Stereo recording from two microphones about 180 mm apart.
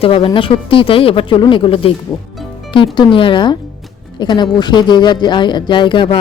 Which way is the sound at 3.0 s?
30° left (ahead or behind).